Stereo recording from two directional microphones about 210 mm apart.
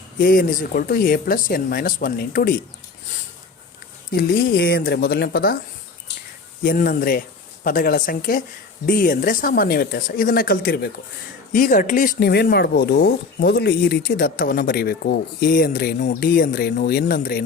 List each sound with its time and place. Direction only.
0.2 s speech: 40° left (ahead or behind)
4.1 s speech: 45° left (ahead or behind)
6.6 s speech: 45° left (ahead or behind)